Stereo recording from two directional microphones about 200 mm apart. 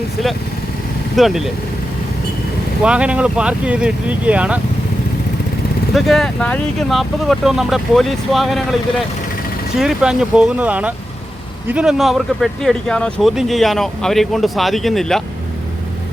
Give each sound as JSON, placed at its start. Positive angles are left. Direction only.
{"t": 1.1, "sound": "speech", "side_deg": 0}
{"t": 2.8, "sound": "speech", "side_deg": -5}
{"t": 5.9, "sound": "speech", "side_deg": 0}
{"t": 9.7, "sound": "speech", "side_deg": -5}